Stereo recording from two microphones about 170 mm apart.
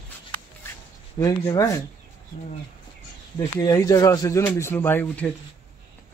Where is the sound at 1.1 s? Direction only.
20° left (ahead or behind).